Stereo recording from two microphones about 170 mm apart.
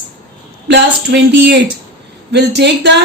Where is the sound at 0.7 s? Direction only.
90° right.